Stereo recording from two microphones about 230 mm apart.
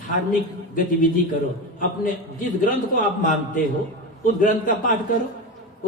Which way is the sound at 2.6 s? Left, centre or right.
Left.